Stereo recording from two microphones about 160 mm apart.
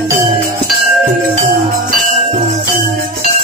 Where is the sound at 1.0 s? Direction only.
60° right (ahead or behind).